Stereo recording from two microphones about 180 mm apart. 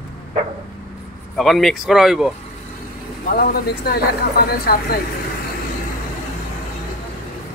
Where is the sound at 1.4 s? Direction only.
Centre (ahead or behind).